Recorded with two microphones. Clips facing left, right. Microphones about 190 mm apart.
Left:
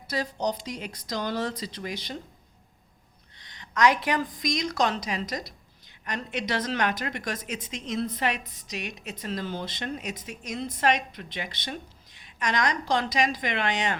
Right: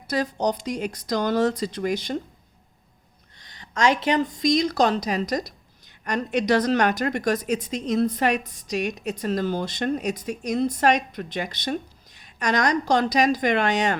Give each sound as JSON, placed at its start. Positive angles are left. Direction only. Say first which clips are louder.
{"t": 0.1, "sound": "speech", "louder": "right 5 dB", "side_deg": -45}
{"t": 3.4, "sound": "a woman's voice", "louder": "right 1 dB", "side_deg": -35}